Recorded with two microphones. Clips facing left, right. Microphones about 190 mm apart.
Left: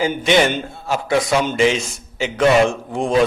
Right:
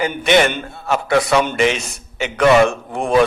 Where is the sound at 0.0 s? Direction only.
60° right (ahead or behind).